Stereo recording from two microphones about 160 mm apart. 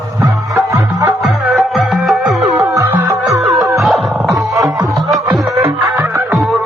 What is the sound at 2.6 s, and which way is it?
Music, 15° right (ahead or behind).